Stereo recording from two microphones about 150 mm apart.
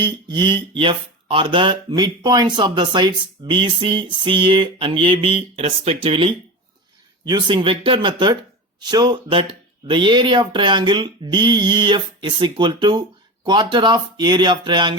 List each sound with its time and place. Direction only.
0.0 s speech: 30° right (ahead or behind)